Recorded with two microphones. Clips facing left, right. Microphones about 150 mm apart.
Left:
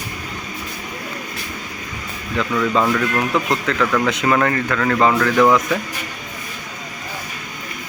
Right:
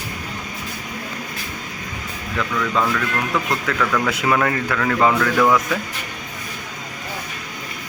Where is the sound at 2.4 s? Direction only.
20° left (ahead or behind).